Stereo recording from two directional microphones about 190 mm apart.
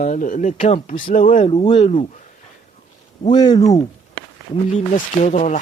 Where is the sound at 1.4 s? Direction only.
30° left (ahead or behind).